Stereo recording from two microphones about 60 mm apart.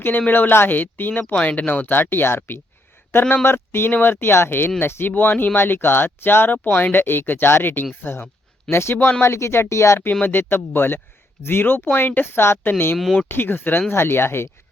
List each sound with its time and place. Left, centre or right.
0.3 s speech: left
10.1 s speech: left